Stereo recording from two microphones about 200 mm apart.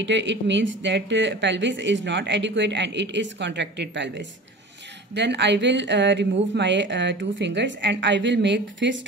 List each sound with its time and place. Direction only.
0.0 s a woman's voice: 65° right (ahead or behind)
5.1 s a woman's voice: 60° right (ahead or behind)